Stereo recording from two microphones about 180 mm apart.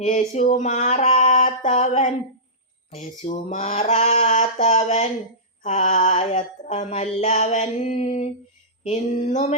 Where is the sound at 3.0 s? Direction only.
40° left (ahead or behind).